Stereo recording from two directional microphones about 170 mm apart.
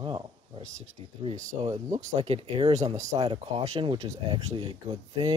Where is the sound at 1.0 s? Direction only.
35° right (ahead or behind).